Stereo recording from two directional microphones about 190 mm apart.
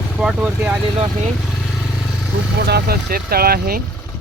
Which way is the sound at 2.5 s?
60° right (ahead or behind).